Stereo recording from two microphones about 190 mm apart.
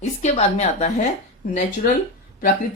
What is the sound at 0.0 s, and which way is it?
A woman's voice, 35° left (ahead or behind).